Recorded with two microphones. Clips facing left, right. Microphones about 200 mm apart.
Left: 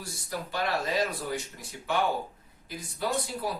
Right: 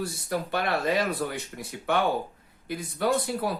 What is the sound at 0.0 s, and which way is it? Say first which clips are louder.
Speech: right 7 dB; 60° right (ahead or behind).